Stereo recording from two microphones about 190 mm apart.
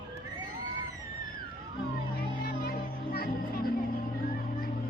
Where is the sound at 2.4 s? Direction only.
55° left (ahead or behind).